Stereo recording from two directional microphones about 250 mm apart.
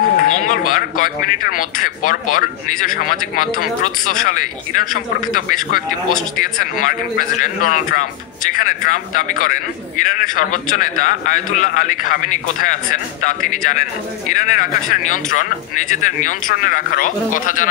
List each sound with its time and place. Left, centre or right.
0.0 s a man's voice: left